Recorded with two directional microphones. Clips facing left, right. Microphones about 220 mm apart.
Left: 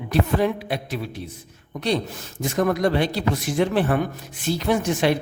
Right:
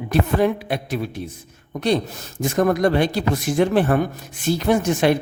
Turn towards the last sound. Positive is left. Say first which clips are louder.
# right 3 dB
turn(degrees=-45)  # may be behind; listen again after turning